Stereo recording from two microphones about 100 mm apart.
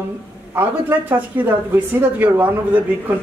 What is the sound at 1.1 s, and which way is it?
A woman's voice, 15° right (ahead or behind).